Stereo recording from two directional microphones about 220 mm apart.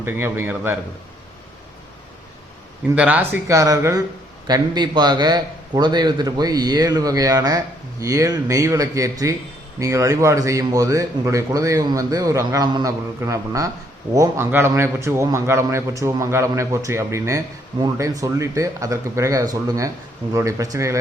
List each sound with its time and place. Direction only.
0.0 s speech: 10° right (ahead or behind)
2.9 s speech: 5° right (ahead or behind)